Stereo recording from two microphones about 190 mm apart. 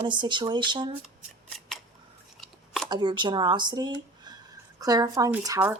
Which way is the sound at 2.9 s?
25° right (ahead or behind).